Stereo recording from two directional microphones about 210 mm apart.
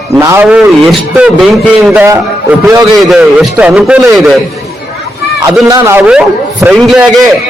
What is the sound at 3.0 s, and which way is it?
A man's voice, centre (ahead or behind).